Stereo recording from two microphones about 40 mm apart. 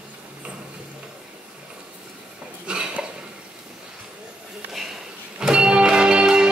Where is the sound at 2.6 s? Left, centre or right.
Right.